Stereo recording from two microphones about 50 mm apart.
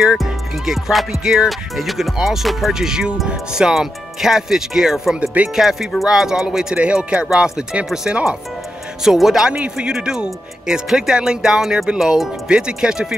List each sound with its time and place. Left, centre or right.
0.2 s speech: centre
1.5 s speech: centre
5.2 s speech: right
5.6 s speech: centre
9.0 s speech: centre
9.5 s speech: centre